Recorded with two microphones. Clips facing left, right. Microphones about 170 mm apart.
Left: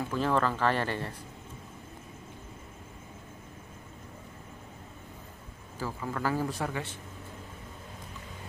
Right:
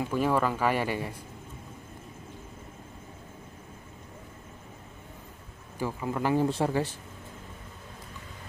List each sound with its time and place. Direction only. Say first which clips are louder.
0.1 s speech: right 1 dB; 10° right (ahead or behind)
5.8 s a man's voice: right 4 dB; 15° right (ahead or behind); by 7.0 s 35° right (ahead or behind)